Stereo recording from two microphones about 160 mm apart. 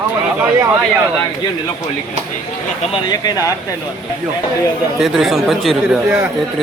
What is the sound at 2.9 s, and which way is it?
Speech, 25° left (ahead or behind).